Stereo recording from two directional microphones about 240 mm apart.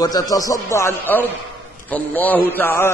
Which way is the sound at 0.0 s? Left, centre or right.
Centre.